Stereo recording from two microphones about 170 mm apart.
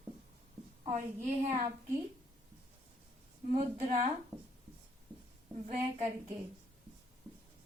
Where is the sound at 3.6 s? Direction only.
40° right (ahead or behind).